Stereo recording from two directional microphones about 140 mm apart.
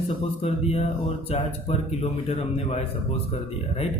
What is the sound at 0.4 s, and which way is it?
A man's voice, 45° left (ahead or behind).